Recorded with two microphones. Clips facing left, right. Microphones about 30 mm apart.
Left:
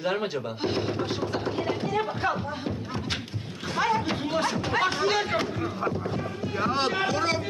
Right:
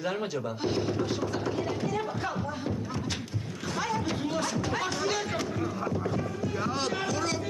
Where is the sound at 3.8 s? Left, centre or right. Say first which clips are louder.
Left 5 dB; left.